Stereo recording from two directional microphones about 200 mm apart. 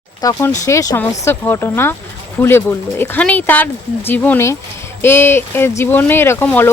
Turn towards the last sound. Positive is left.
turn(degrees=10)  # may be behind; listen again after turning